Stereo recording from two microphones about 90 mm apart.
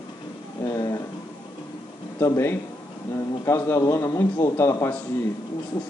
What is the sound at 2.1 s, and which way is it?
A man's voice, 30° left (ahead or behind).